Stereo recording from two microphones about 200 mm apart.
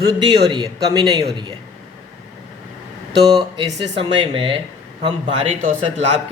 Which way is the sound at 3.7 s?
25° right (ahead or behind).